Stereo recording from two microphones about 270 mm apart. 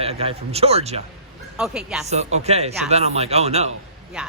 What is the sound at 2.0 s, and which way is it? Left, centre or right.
Speech, right.